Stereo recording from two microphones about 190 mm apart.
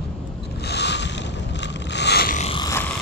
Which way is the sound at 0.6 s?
60° left (ahead or behind).